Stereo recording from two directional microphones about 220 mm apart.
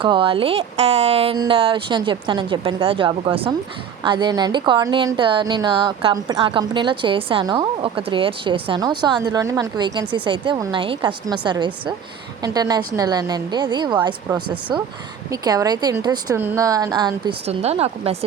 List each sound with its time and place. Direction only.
0.0 s a woman's voice: 25° right (ahead or behind)